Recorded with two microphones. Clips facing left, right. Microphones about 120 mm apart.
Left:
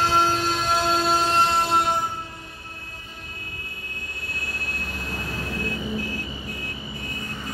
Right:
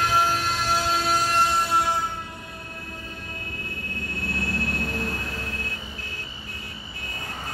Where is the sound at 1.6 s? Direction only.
25° left (ahead or behind).